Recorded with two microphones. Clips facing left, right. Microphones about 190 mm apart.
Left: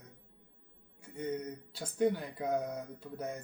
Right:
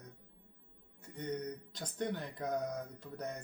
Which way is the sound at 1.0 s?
5° left (ahead or behind).